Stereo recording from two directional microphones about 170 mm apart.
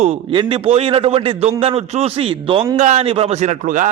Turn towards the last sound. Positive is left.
turn(degrees=-50)  # may be behind; listen again after turning